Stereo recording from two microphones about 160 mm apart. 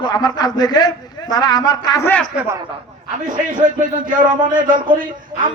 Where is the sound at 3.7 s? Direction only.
55° right (ahead or behind).